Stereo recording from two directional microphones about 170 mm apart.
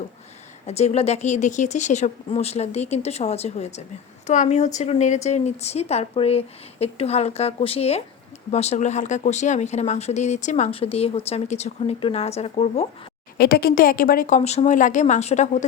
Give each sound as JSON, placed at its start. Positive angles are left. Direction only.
{"t": 0.7, "sound": "speech", "side_deg": 40}
{"t": 13.4, "sound": "a woman's voice", "side_deg": 65}